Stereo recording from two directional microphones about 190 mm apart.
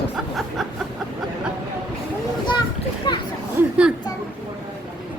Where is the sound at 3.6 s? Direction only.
10° right (ahead or behind).